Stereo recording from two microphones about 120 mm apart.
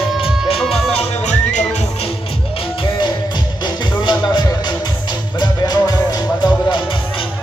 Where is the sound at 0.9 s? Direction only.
75° left (ahead or behind).